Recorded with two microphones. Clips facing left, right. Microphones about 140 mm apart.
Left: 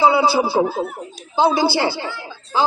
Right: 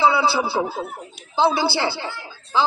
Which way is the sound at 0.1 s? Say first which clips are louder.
Left 4 dB; 20° left (ahead or behind).